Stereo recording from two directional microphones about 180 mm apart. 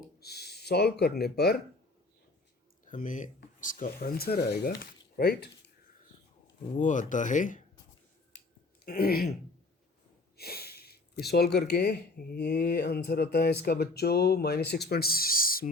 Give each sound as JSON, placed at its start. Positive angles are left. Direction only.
{"t": 0.2, "sound": "speech", "side_deg": 65}
{"t": 2.8, "sound": "speech", "side_deg": 45}
{"t": 6.7, "sound": "speech", "side_deg": 45}
{"t": 8.8, "sound": "speech", "side_deg": 55}
{"t": 10.3, "sound": "speech", "side_deg": 60}